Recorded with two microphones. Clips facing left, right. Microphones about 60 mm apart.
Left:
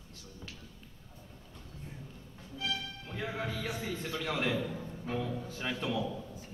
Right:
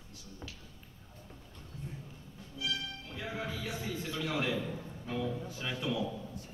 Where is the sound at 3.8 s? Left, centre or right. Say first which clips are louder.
Left 1 dB; centre.